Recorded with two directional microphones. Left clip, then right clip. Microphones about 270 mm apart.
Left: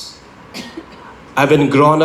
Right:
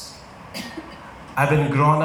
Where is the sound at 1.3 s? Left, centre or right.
Left.